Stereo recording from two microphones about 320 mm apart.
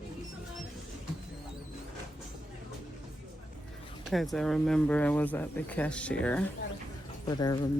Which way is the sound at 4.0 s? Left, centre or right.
Centre.